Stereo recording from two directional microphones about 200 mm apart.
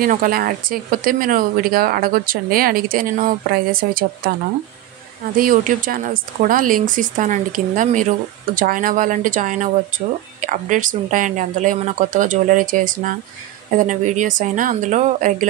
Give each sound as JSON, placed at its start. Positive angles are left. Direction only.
{"t": 0.0, "sound": "speech", "side_deg": -45}
{"t": 5.4, "sound": "speech", "side_deg": -40}